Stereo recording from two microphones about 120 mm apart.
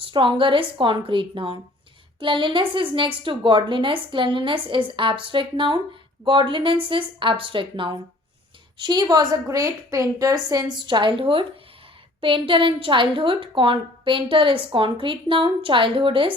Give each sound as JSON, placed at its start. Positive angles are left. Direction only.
{"t": 0.0, "sound": "a woman's voice", "side_deg": -45}